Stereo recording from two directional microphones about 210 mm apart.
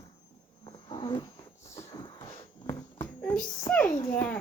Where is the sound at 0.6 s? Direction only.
20° left (ahead or behind).